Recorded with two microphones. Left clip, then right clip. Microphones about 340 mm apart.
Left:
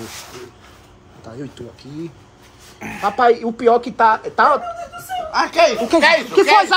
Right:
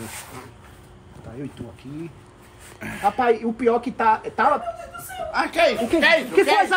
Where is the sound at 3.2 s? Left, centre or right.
Left.